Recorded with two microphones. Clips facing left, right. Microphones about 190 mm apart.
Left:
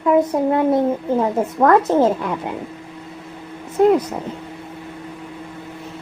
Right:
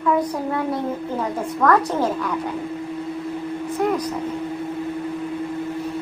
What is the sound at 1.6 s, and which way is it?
Speech, 25° left (ahead or behind).